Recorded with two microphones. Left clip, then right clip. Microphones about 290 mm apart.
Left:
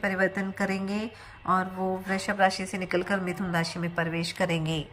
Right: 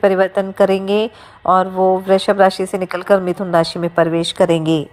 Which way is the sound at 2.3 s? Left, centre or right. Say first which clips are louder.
Right 12 dB; right.